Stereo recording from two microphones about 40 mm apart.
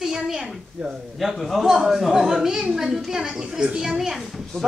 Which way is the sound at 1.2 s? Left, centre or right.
Centre.